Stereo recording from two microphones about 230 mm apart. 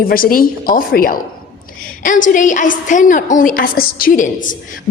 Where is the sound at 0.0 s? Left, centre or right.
Left.